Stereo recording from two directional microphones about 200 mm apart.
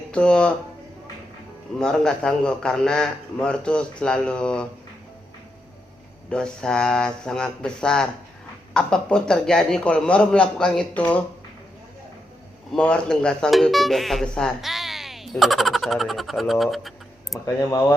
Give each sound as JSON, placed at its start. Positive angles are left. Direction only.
{"t": 0.1, "sound": "speech", "side_deg": 5}
{"t": 1.8, "sound": "speech", "side_deg": 5}
{"t": 6.3, "sound": "speech", "side_deg": 5}
{"t": 12.7, "sound": "speech", "side_deg": 5}
{"t": 17.4, "sound": "speech", "side_deg": 15}